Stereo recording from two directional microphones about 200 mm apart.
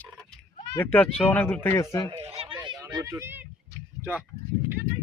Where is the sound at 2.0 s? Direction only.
30° right (ahead or behind).